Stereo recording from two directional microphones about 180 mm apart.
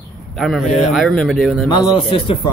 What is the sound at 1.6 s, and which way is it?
Speech, 25° left (ahead or behind).